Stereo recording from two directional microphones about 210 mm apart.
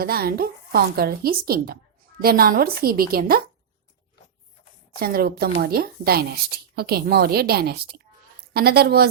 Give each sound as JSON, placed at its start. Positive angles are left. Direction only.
{"t": 0.0, "sound": "speech", "side_deg": -45}
{"t": 4.9, "sound": "speech", "side_deg": -45}